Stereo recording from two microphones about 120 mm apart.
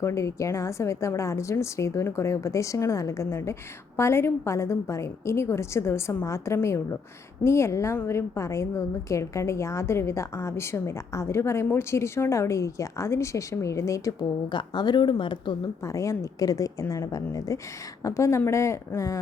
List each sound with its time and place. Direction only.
0.0 s a woman's voice: 25° left (ahead or behind)
14.5 s speech: 40° left (ahead or behind)
15.9 s a woman's voice: 25° left (ahead or behind)